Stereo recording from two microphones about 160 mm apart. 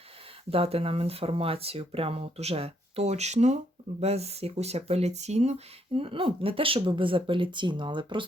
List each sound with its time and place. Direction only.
0.5 s speech: 35° right (ahead or behind)